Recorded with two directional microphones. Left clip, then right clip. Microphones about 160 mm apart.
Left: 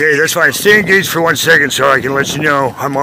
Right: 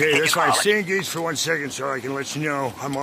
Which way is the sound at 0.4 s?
30° left (ahead or behind).